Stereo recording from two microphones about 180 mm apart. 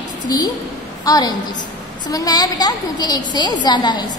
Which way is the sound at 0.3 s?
20° left (ahead or behind).